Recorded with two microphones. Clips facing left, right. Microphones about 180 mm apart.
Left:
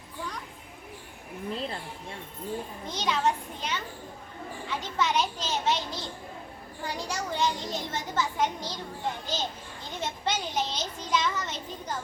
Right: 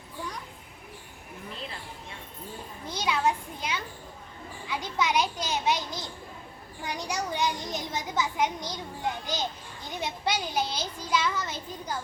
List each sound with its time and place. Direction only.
2.8 s a child's voice: 10° right (ahead or behind)